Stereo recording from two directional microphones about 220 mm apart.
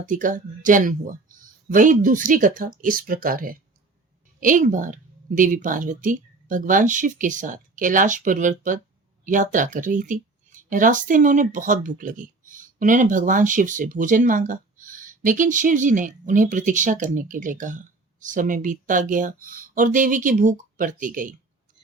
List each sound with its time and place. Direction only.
0.1 s speech: 35° right (ahead or behind)